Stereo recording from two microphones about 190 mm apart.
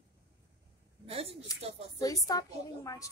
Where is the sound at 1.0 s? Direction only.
30° right (ahead or behind).